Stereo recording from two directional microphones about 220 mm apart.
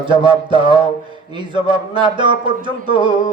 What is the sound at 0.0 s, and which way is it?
Speech, 20° right (ahead or behind).